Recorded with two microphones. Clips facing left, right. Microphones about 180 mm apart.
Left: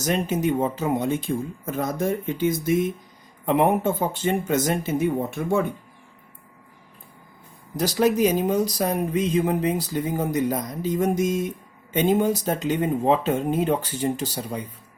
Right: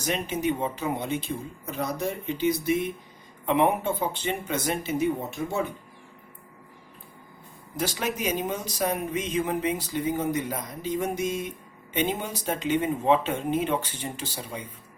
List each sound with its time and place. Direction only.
0.0 s speech: 45° left (ahead or behind)
7.8 s speech: 35° left (ahead or behind)